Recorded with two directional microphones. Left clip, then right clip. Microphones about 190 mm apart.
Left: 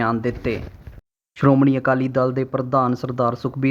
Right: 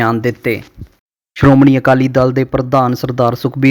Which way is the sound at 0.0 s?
35° right (ahead or behind).